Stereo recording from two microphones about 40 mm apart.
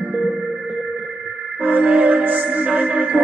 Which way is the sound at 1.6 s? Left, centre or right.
Right.